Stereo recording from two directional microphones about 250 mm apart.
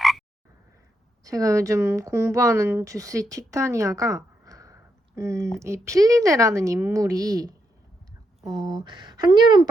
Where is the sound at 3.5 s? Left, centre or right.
Centre.